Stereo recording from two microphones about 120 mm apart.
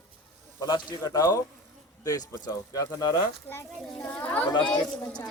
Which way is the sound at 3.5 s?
20° left (ahead or behind).